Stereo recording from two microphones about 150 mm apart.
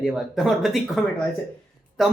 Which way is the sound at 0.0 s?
5° right (ahead or behind).